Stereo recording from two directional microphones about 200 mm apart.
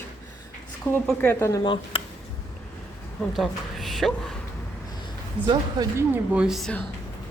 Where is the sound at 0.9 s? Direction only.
10° left (ahead or behind).